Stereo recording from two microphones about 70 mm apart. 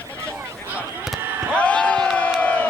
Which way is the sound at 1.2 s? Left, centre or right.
Right.